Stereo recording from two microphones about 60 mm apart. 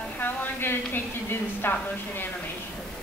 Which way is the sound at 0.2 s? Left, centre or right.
Left.